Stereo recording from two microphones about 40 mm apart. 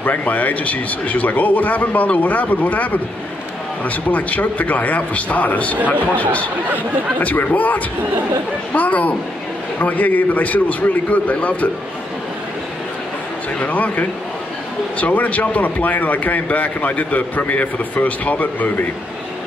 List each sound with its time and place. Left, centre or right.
0.0 s speech: left
7.2 s speech: left
13.6 s speech: left